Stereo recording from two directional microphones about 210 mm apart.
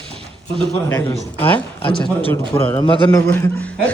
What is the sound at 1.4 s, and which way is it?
Speech, 25° left (ahead or behind).